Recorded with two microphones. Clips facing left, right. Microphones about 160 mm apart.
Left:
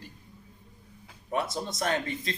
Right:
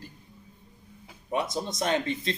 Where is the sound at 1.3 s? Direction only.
20° right (ahead or behind).